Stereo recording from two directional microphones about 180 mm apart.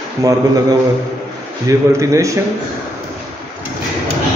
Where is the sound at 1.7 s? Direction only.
15° right (ahead or behind).